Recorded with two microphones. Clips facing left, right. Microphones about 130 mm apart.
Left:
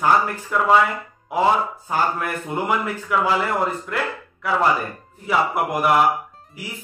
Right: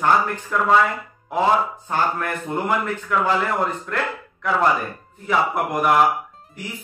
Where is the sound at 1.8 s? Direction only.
5° left (ahead or behind).